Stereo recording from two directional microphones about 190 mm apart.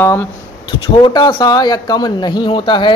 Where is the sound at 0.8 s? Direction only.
25° left (ahead or behind).